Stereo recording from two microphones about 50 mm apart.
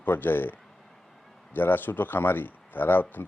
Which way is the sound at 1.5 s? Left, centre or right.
Left.